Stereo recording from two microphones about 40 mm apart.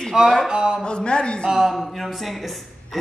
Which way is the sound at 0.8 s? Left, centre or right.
Left.